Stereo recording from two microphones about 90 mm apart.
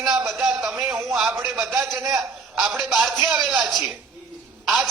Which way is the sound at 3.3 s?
15° right (ahead or behind).